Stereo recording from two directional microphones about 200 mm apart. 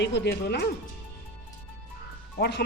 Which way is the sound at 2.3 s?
55° left (ahead or behind).